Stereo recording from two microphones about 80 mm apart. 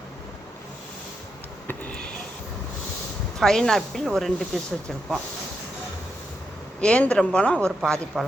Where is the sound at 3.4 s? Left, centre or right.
Centre.